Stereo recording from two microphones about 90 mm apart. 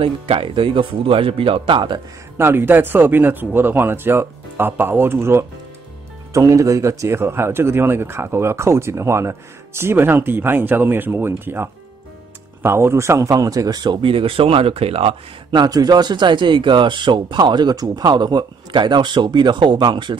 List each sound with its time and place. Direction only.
0.0 s speech: 90° right; by 2.0 s 65° right (ahead or behind)
2.3 s a man's voice: 25° right (ahead or behind); by 13.9 s 50° right (ahead or behind)
14.0 s speech: 85° right
15.6 s speech: 50° right (ahead or behind)